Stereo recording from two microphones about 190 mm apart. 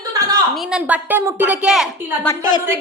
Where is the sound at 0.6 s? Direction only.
5° right (ahead or behind).